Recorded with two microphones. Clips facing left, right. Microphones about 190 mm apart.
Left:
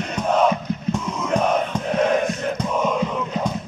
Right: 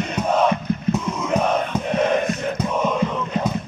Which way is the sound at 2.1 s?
Centre (ahead or behind).